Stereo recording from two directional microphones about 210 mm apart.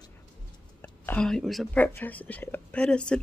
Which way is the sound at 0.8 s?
10° left (ahead or behind).